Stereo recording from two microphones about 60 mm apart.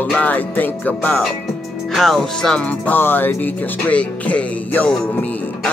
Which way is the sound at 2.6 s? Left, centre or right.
Left.